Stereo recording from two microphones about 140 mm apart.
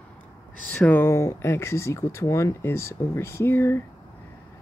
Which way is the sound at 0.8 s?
15° left (ahead or behind).